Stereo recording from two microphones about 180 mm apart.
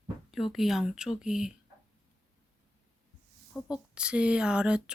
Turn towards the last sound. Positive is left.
turn(degrees=-5)  # may be behind; listen again after turning